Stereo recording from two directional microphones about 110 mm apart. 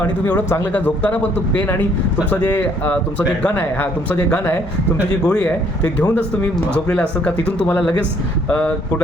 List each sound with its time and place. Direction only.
0.3 s speech: 20° left (ahead or behind)